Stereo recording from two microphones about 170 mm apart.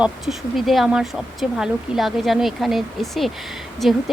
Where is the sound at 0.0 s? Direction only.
Centre (ahead or behind).